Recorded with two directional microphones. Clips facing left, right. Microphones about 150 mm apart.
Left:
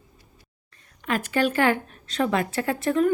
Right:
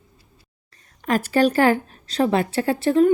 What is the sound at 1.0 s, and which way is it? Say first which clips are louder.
A woman's voice: right 5 dB; 35° right (ahead or behind).